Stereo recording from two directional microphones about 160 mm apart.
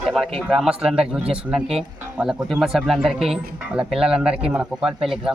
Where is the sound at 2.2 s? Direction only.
Centre (ahead or behind).